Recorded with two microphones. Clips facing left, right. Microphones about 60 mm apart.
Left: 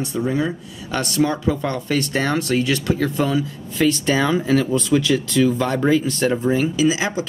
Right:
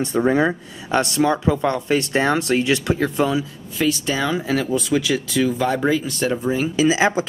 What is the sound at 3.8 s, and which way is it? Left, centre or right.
Speech, centre.